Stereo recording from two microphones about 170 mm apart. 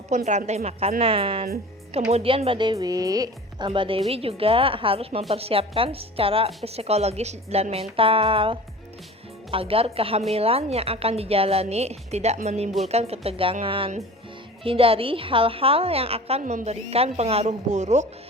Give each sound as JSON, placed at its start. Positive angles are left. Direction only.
{"t": 0.3, "sound": "a woman's voice", "side_deg": -40}
{"t": 3.7, "sound": "a woman's voice", "side_deg": -30}
{"t": 16.4, "sound": "a woman's voice", "side_deg": -45}